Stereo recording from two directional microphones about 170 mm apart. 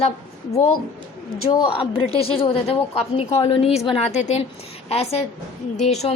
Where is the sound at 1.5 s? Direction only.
30° left (ahead or behind).